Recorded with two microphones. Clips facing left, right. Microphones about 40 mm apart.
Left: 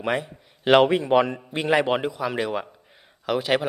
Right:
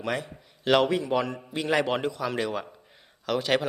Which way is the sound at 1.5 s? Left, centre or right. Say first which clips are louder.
Left 4 dB; left.